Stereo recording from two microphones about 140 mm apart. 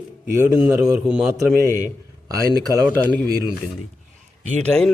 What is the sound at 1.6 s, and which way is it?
Speech, 20° left (ahead or behind).